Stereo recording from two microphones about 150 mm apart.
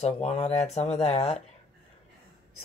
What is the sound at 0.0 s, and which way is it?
Speech, 45° left (ahead or behind).